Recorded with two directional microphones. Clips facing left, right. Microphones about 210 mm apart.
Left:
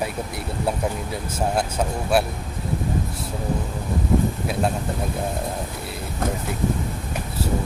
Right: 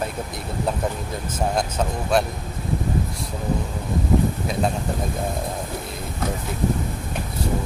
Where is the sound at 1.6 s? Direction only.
5° left (ahead or behind).